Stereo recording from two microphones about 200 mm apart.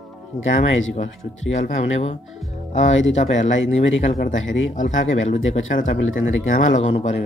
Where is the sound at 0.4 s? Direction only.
75° left (ahead or behind).